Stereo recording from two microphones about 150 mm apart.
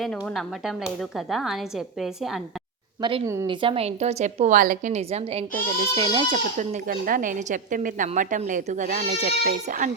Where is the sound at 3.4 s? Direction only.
35° right (ahead or behind).